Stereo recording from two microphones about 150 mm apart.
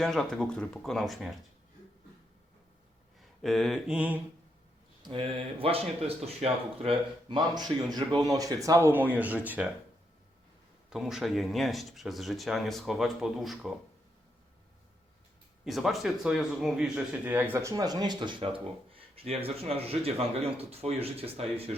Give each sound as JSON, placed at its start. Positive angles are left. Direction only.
{"t": 0.0, "sound": "speech", "side_deg": 0}
{"t": 3.2, "sound": "mantra", "side_deg": 0}
{"t": 5.0, "sound": "speech", "side_deg": -35}
{"t": 10.8, "sound": "speech", "side_deg": -5}
{"t": 15.6, "sound": "speech", "side_deg": 0}